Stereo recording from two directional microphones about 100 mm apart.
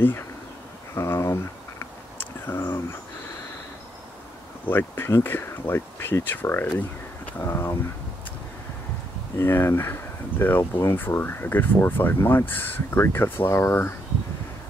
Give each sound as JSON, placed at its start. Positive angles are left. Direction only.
{"t": 0.9, "sound": "a sound", "side_deg": 30}
{"t": 4.6, "sound": "speech", "side_deg": 20}
{"t": 9.4, "sound": "speech", "side_deg": 25}